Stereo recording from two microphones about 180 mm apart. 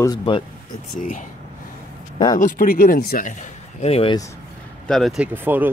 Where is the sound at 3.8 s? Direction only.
35° left (ahead or behind).